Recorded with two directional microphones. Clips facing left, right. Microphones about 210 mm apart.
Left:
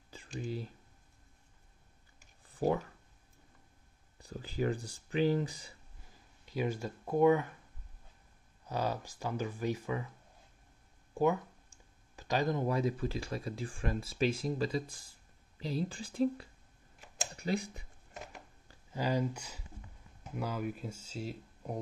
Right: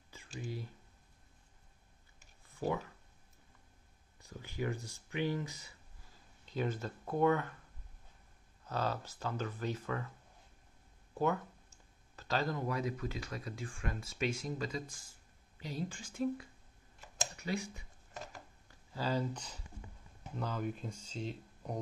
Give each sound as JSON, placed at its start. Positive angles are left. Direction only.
{"t": 0.4, "sound": "speech", "side_deg": 30}
{"t": 2.5, "sound": "a sound", "side_deg": 35}
{"t": 4.2, "sound": "speech", "side_deg": 30}
{"t": 6.4, "sound": "speech", "side_deg": 10}
{"t": 8.6, "sound": "speech", "side_deg": 15}
{"t": 11.1, "sound": "speech", "side_deg": 15}
{"t": 18.9, "sound": "speech", "side_deg": 15}